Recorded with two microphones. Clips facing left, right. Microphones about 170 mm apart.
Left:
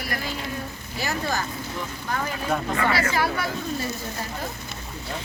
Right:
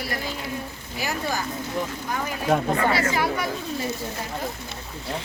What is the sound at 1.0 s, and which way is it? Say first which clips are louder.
Speech: even; 10° right (ahead or behind).